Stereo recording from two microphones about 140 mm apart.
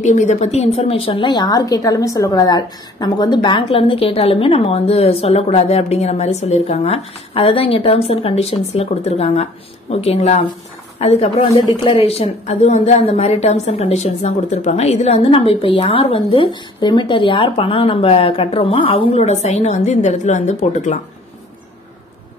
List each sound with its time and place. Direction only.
0.0 s a woman's voice: 55° left (ahead or behind)